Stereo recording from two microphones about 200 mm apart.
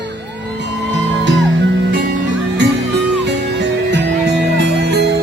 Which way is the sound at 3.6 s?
60° right (ahead or behind).